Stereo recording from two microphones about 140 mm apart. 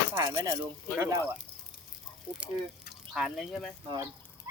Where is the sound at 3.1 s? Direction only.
Centre (ahead or behind).